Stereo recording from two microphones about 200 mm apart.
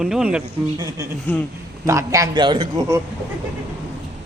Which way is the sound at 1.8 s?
15° right (ahead or behind).